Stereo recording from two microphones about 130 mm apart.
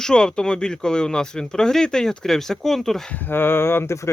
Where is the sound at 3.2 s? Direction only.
15° left (ahead or behind).